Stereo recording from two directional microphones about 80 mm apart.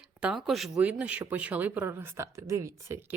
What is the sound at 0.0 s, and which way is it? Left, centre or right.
Speech, centre.